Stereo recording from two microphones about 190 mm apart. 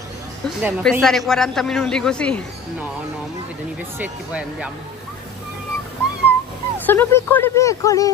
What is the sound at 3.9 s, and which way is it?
Speech, 10° right (ahead or behind).